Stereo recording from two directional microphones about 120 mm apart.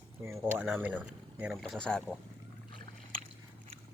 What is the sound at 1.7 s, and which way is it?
Speech, 5° left (ahead or behind).